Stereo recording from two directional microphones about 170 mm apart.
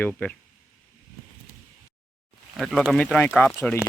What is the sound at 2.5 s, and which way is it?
Speech, centre (ahead or behind).